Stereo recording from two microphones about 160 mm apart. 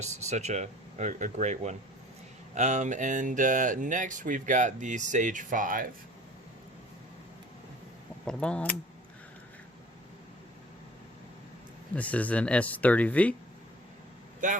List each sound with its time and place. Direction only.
0.0 s speech: 45° right (ahead or behind)
8.3 s speech: 5° left (ahead or behind)
11.9 s speech: 10° left (ahead or behind)
14.4 s speech: 55° right (ahead or behind)